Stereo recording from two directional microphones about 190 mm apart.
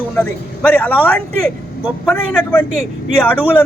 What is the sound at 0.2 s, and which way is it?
A man's voice, 10° left (ahead or behind).